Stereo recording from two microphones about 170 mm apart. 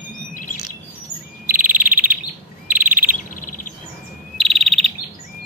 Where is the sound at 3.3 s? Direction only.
50° left (ahead or behind).